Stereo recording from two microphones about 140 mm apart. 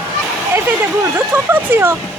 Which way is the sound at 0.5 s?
15° right (ahead or behind).